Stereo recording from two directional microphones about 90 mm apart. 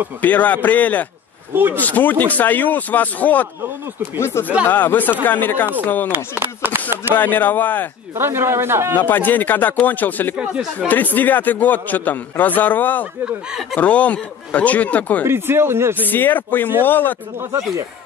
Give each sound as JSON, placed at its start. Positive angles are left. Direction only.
{"t": 0.2, "sound": "a man's voice", "side_deg": 20}
{"t": 1.5, "sound": "speech", "side_deg": -20}
{"t": 1.8, "sound": "a man's voice", "side_deg": 20}
{"t": 6.4, "sound": "speech", "side_deg": -25}
{"t": 7.2, "sound": "a man's voice", "side_deg": 20}
{"t": 8.2, "sound": "speech", "side_deg": -25}
{"t": 8.9, "sound": "a man's voice", "side_deg": 20}
{"t": 10.3, "sound": "speech", "side_deg": -10}
{"t": 10.9, "sound": "a man's voice", "side_deg": 20}
{"t": 15.2, "sound": "speech", "side_deg": -25}
{"t": 16.1, "sound": "a man's voice", "side_deg": 20}